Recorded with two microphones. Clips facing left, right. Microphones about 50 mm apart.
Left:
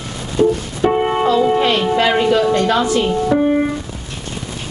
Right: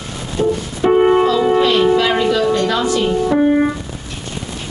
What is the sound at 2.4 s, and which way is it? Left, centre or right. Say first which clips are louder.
Music: even; centre.